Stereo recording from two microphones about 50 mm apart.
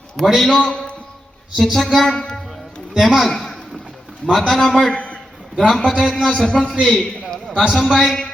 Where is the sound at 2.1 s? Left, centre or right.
Centre.